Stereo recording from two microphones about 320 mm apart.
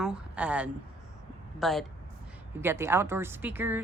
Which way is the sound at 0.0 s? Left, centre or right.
Centre.